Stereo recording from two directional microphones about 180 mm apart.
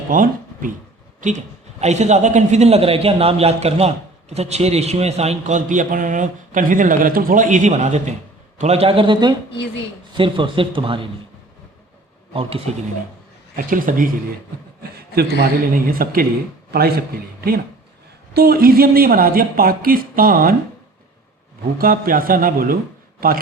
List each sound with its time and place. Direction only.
0.1 s speech: 50° right (ahead or behind)
1.8 s a man's voice: 40° right (ahead or behind)
12.3 s a man's voice: 30° right (ahead or behind)
13.6 s a man's voice: 50° right (ahead or behind)
14.9 s speech: 60° right (ahead or behind)
18.3 s speech: 55° right (ahead or behind)
21.8 s a man's voice: 50° right (ahead or behind)